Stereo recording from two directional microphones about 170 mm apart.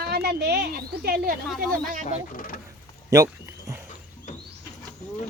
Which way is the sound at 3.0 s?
20° right (ahead or behind).